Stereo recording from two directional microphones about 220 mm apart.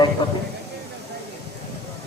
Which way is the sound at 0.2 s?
20° left (ahead or behind).